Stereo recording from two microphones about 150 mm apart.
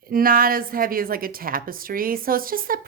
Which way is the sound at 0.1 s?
70° right (ahead or behind).